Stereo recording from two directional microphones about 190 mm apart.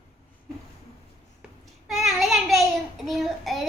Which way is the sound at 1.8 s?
Centre (ahead or behind).